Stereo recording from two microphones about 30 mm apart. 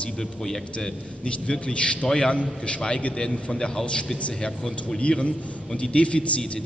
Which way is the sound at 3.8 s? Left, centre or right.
Left.